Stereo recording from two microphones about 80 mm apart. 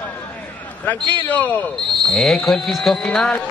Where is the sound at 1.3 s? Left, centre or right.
Left.